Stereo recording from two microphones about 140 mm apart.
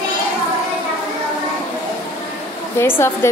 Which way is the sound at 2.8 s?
15° left (ahead or behind).